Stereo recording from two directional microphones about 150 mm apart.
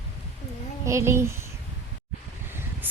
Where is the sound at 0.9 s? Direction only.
20° right (ahead or behind).